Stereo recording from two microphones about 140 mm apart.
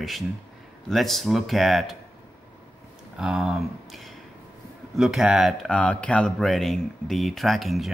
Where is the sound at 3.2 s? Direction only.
5° right (ahead or behind).